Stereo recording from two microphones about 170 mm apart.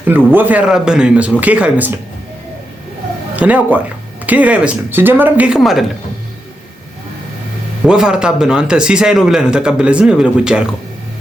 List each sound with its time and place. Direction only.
0.3 s speech: 10° right (ahead or behind)
3.3 s speech: 10° right (ahead or behind)
7.9 s speech: 5° right (ahead or behind)